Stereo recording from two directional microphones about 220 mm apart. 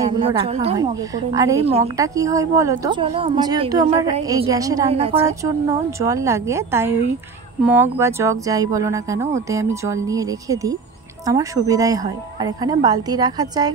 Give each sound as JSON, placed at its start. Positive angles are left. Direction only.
{"t": 0.4, "sound": "a woman's voice", "side_deg": -25}
{"t": 0.7, "sound": "a woman's voice", "side_deg": -15}
{"t": 4.9, "sound": "a woman's voice", "side_deg": -25}
{"t": 5.9, "sound": "a woman's voice", "side_deg": -15}